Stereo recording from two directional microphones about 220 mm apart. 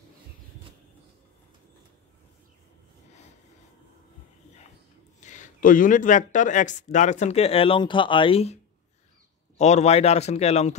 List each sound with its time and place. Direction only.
5.2 s speech: 35° left (ahead or behind)
9.6 s speech: 30° left (ahead or behind)